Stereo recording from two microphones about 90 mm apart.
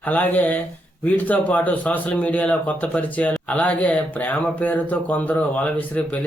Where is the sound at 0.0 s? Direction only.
20° left (ahead or behind).